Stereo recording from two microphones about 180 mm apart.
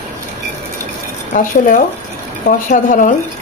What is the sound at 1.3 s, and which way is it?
Speech, 50° left (ahead or behind).